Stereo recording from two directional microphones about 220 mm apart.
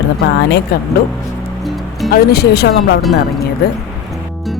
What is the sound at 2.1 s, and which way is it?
Speech, 45° left (ahead or behind).